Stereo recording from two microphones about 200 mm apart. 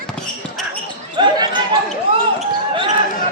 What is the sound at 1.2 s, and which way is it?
Basketball bounce, 20° right (ahead or behind).